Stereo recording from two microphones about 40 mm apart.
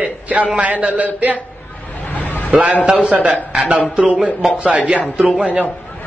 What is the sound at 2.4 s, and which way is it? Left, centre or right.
A man's voice, right.